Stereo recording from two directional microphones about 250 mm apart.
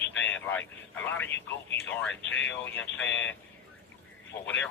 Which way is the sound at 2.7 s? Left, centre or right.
Centre.